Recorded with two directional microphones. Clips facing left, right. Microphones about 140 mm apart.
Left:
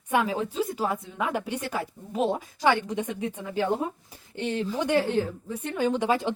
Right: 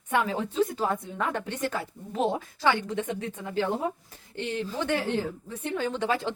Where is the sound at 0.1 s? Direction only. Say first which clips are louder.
Left 2 dB; 10° left (ahead or behind).